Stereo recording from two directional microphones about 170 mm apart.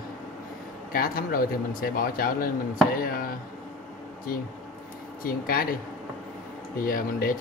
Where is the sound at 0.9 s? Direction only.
60° left (ahead or behind).